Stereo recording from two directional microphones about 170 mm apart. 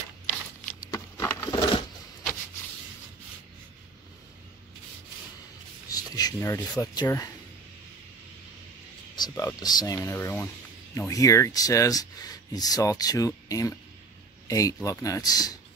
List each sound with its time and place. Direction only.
0.9 s wood: 15° left (ahead or behind)
1.5 s coin: 30° left (ahead or behind)
5.9 s a sound: 20° left (ahead or behind)
6.8 s speech: 20° left (ahead or behind)
9.1 s a sound: 25° left (ahead or behind)
9.5 s speech: 25° left (ahead or behind)